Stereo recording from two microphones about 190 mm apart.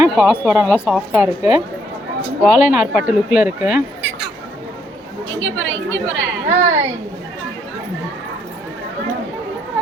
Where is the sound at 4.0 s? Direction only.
70° right (ahead or behind).